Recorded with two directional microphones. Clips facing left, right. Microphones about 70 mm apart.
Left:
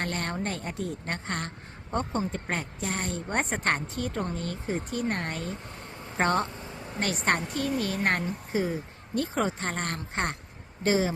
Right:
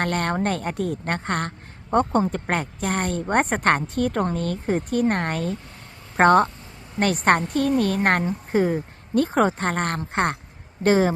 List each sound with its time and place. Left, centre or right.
0.0 s a woman's voice: right